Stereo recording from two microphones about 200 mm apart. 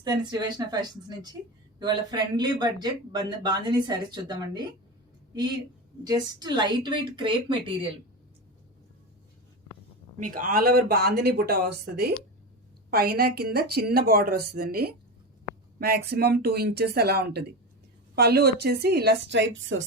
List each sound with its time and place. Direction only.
0.0 s speech: 20° right (ahead or behind)
6.1 s speech: 20° right (ahead or behind)
10.2 s a woman's voice: 40° right (ahead or behind); by 19.8 s 65° right (ahead or behind)